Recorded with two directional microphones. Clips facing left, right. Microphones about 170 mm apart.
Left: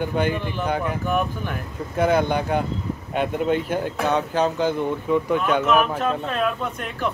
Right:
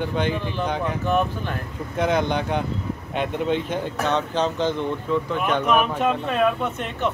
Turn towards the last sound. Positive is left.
turn(degrees=0)  # may be behind; listen again after turning